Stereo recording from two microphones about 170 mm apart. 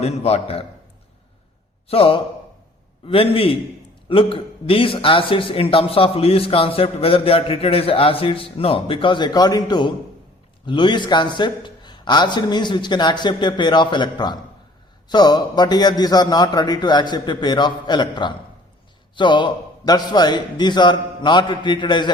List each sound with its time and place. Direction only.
0.0 s a man's voice: 40° left (ahead or behind)
1.9 s a man's voice: 35° left (ahead or behind)